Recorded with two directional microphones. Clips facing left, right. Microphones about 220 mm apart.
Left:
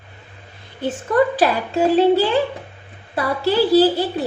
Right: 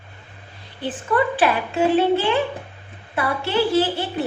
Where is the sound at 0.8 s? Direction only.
40° left (ahead or behind).